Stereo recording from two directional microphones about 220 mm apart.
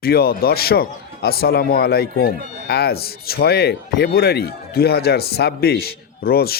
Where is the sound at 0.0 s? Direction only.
45° left (ahead or behind).